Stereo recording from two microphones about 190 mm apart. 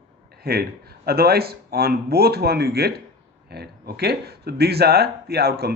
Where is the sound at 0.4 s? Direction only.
55° right (ahead or behind).